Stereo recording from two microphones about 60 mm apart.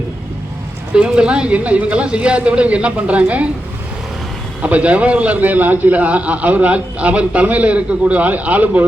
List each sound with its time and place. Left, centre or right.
0.9 s a man's voice: centre
4.6 s a man's voice: right